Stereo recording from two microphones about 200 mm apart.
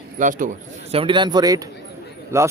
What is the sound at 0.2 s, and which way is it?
Speech, 40° right (ahead or behind).